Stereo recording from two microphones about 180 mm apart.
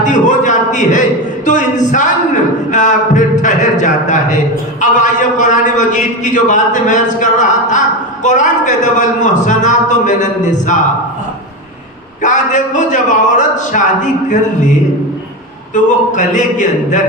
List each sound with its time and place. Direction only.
0.0 s a sound: 45° left (ahead or behind)
4.8 s a man's voice: 45° left (ahead or behind)
12.2 s a man's voice: 45° left (ahead or behind)
15.7 s a man's voice: 45° left (ahead or behind)